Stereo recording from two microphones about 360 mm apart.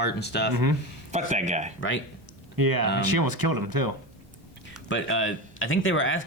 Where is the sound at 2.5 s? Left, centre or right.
Right.